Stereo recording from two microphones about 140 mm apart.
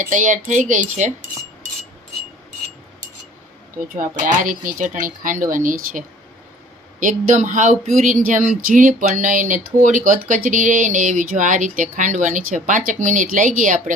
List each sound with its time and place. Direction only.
0.0 s speech: 65° right (ahead or behind)
3.9 s speech: 65° right (ahead or behind)